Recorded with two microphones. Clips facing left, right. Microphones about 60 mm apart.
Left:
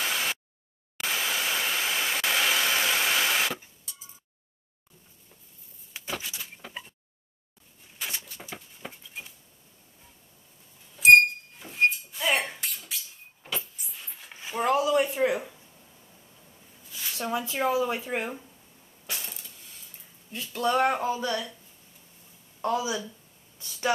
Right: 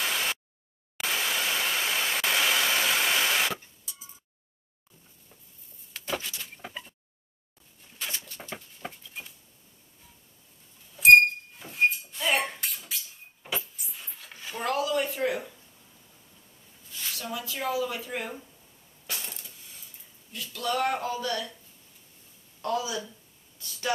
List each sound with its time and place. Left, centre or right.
0.0 s a sound: centre
0.9 s hair dryer: centre
5.9 s vehicle: centre
8.8 s a sound: centre
11.0 s a sound: centre
17.1 s speech: left
19.1 s coin: centre
20.3 s speech: left
22.6 s speech: left